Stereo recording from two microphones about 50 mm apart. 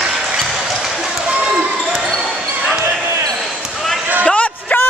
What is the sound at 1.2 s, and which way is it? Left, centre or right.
Basketball bounce, right.